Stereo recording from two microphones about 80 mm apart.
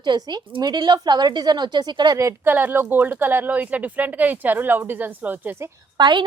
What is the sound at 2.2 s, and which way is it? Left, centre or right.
Speech, right.